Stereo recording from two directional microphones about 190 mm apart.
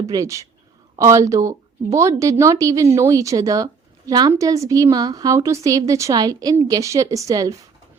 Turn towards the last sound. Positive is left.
turn(degrees=-20)  # may be behind; listen again after turning